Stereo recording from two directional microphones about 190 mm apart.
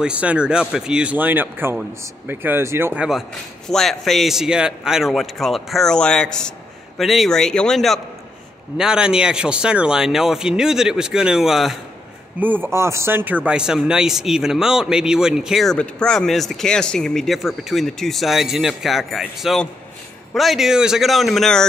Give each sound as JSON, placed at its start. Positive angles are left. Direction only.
{"t": 0.0, "sound": "speech", "side_deg": -5}